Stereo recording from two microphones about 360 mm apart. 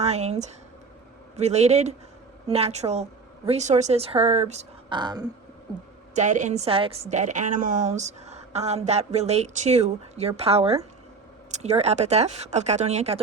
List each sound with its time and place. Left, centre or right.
0.0 s a woman's voice: centre